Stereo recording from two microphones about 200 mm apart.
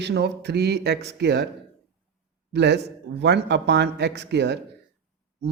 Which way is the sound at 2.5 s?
55° right (ahead or behind).